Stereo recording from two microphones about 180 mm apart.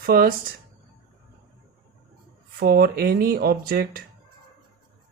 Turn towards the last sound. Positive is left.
turn(degrees=-55)  # may be behind; listen again after turning